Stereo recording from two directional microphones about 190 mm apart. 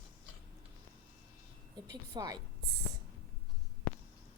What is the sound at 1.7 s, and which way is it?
Speech, 20° right (ahead or behind).